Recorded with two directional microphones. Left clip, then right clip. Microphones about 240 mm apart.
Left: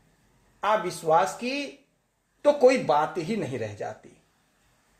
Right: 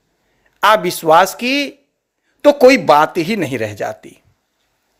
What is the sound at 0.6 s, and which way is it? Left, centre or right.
Speech, right.